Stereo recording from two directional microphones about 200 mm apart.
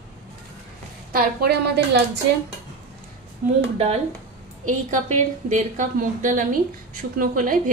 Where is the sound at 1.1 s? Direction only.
50° right (ahead or behind).